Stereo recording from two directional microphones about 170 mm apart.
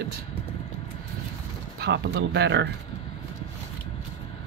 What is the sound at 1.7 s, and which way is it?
Speech, 90° right.